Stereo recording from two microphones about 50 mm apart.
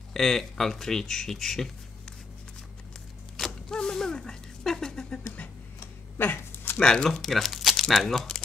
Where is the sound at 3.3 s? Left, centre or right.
Centre.